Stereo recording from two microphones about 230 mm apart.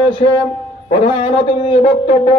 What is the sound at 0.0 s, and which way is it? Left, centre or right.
A man's voice, left.